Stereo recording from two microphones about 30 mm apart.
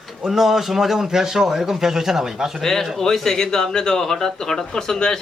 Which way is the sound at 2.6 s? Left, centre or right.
Centre.